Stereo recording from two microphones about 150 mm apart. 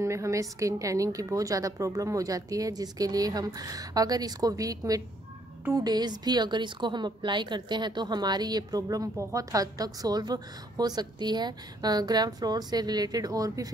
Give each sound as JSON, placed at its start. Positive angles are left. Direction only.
{"t": 0.0, "sound": "a woman's voice", "side_deg": -20}